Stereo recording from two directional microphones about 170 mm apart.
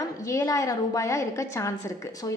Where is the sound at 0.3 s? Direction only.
20° left (ahead or behind).